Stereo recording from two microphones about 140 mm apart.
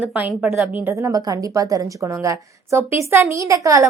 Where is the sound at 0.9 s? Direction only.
25° right (ahead or behind).